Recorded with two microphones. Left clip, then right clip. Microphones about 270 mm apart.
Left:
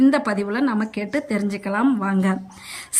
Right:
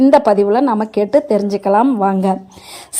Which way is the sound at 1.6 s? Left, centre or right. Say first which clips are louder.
Right 8 dB; right.